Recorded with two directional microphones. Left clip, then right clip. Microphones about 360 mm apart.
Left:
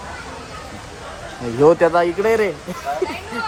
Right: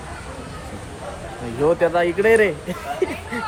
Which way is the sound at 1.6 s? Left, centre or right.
Centre.